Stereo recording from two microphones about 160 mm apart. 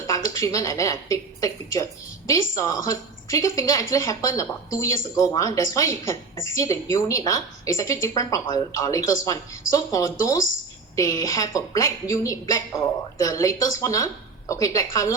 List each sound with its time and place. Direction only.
0.1 s a woman's voice: 20° left (ahead or behind)